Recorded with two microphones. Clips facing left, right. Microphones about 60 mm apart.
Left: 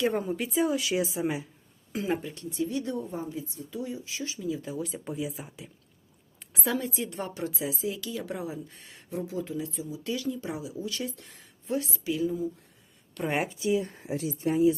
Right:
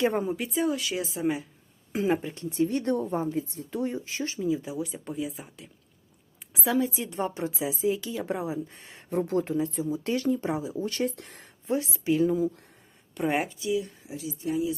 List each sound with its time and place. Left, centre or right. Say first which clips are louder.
0.0 s a woman's voice: right 2 dB; right
0.3 s a woman's voice: left 1 dB; centre
1.9 s speech: right 4 dB; right
2.6 s a woman's voice: right 5 dB; right
4.4 s a woman's voice: right 6 dB; right
4.8 s a woman's voice: right 1 dB; centre
7.1 s a woman's voice: right 4 dB; right
9.0 s speech: right 6 dB; right
9.6 s speech: right 7 dB; right
11.6 s a woman's voice: right 3 dB; right
13.2 s a woman's voice: right 2 dB; centre
13.6 s speech: left 1 dB; left